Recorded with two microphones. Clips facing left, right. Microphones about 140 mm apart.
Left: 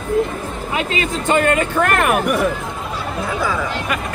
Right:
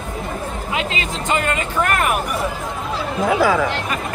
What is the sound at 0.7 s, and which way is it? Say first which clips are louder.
Speech: left 4 dB; 45° left (ahead or behind).